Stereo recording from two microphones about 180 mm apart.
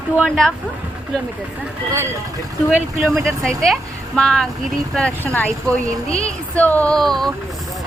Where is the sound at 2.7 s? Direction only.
Centre (ahead or behind).